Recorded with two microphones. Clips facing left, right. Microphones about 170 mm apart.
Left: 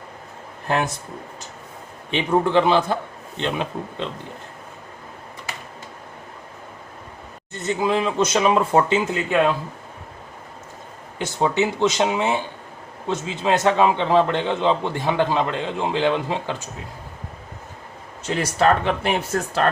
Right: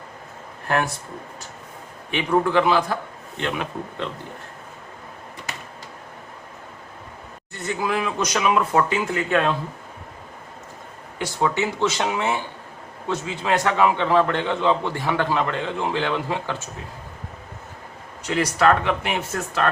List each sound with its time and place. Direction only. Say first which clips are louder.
0.7 s a man's voice: left 1 dB; 20° left (ahead or behind)
2.0 s a man's voice: left 1 dB; 25° left (ahead or behind)
7.5 s a man's voice: left 3 dB; 20° left (ahead or behind)
11.2 s a man's voice: left 2 dB; 20° left (ahead or behind)
18.3 s speech: even; 30° left (ahead or behind)